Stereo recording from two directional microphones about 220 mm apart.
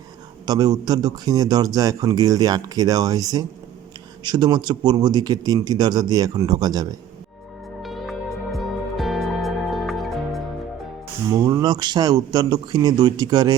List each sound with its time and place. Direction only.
0.4 s speech: 20° right (ahead or behind)
7.8 s music: centre (ahead or behind)
11.3 s speech: 20° right (ahead or behind)